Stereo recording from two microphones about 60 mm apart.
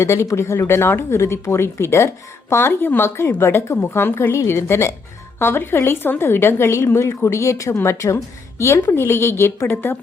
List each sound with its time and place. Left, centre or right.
0.0 s speech: left